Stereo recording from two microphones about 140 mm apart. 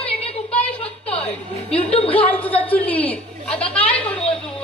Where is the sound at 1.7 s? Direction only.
45° left (ahead or behind).